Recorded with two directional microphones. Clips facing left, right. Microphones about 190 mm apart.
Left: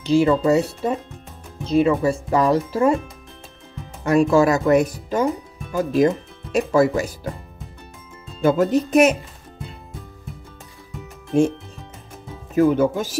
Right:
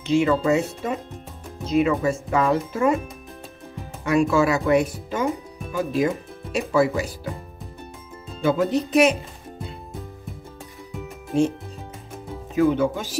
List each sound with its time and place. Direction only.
0.0 s speech: 35° left (ahead or behind)
4.0 s speech: 40° left (ahead or behind)
8.5 s speech: 45° left (ahead or behind)
12.5 s speech: 45° left (ahead or behind)